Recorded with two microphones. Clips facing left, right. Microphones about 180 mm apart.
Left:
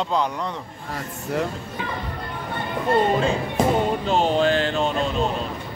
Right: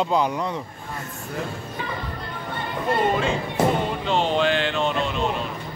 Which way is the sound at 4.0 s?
40° left (ahead or behind).